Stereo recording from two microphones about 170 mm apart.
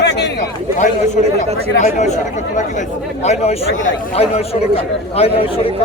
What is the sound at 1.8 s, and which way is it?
A man's voice, 45° left (ahead or behind).